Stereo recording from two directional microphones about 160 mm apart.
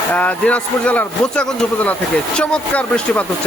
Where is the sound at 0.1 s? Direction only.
10° left (ahead or behind).